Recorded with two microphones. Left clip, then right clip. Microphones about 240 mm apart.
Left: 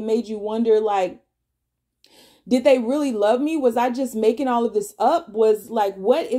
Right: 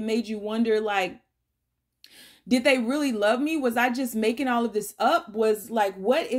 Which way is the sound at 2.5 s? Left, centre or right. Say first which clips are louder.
Left 5 dB; right.